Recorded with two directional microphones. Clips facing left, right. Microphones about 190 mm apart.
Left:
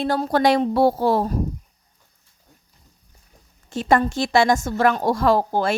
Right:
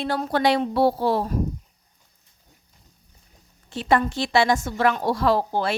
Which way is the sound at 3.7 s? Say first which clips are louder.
Left 2 dB; 45° left (ahead or behind).